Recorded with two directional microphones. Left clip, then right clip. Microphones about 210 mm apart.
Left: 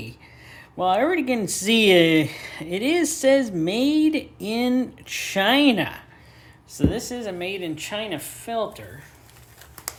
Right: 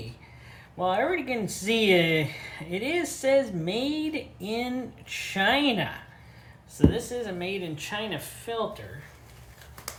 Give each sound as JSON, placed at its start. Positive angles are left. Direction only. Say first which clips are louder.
{"t": 0.5, "sound": "a woman's voice", "louder": "left 5 dB", "side_deg": 45}